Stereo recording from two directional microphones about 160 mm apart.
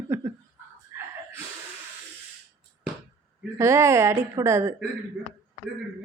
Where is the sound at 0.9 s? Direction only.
15° right (ahead or behind).